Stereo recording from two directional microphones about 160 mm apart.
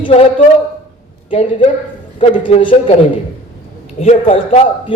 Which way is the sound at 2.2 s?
30° left (ahead or behind).